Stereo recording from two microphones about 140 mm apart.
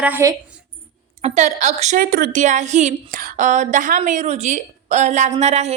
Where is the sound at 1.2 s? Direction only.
55° right (ahead or behind).